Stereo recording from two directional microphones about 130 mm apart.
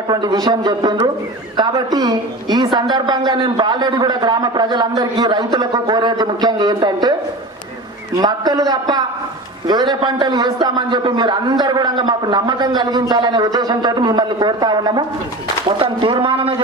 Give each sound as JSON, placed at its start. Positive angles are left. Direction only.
{"t": 0.1, "sound": "a woman's voice", "side_deg": -30}
{"t": 8.2, "sound": "a woman's voice", "side_deg": -30}